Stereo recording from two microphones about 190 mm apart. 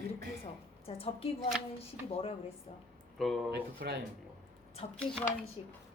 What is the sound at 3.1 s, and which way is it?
Speech, centre (ahead or behind).